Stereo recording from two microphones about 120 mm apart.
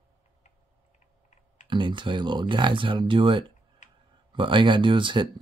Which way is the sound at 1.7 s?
40° right (ahead or behind).